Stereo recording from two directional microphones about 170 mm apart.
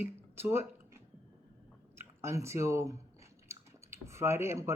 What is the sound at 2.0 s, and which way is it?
Speech, 15° right (ahead or behind).